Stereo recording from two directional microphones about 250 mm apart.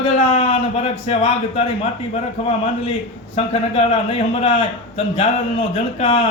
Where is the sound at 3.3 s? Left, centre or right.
Left.